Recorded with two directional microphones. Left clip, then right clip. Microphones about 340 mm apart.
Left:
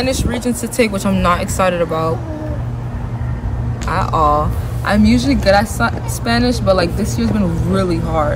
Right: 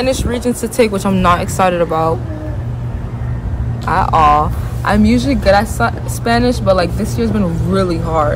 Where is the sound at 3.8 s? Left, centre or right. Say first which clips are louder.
Right 4 dB; centre.